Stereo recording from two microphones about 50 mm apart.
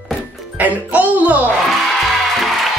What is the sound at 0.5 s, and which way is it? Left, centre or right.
Speech, right.